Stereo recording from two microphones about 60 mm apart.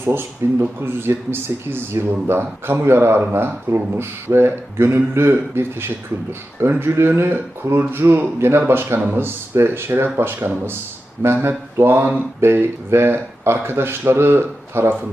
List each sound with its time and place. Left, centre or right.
0.0 s speech: right